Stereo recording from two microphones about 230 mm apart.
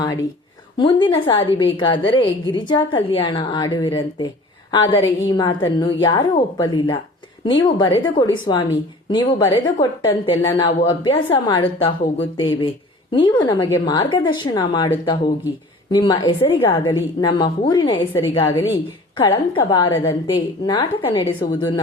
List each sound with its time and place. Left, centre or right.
0.0 s a woman's voice: centre